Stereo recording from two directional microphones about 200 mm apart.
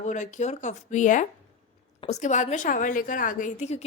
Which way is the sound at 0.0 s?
35° left (ahead or behind).